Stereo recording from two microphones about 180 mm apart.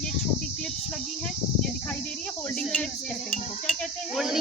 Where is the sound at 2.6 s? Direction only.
5° left (ahead or behind).